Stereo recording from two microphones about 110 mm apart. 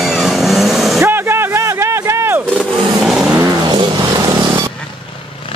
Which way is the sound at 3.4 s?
35° right (ahead or behind).